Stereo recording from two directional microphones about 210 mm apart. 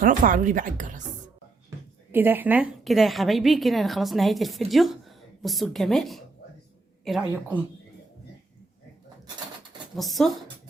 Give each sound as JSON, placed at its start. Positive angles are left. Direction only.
{"t": 0.0, "sound": "speech", "side_deg": -40}
{"t": 2.1, "sound": "a woman's voice", "side_deg": -10}
{"t": 10.0, "sound": "a woman's voice", "side_deg": 0}